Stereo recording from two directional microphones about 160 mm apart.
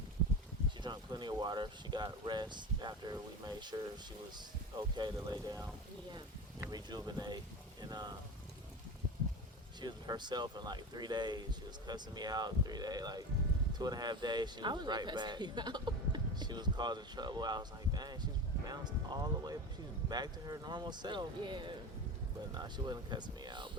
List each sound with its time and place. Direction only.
0.8 s speech: 25° right (ahead or behind)
4.8 s speech: 25° right (ahead or behind)
6.7 s speech: 25° right (ahead or behind)
9.8 s speech: 25° right (ahead or behind)